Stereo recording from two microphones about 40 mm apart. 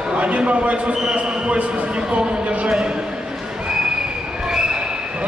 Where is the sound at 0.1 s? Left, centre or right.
Right.